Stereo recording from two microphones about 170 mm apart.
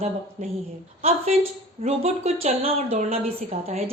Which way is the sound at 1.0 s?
40° right (ahead or behind).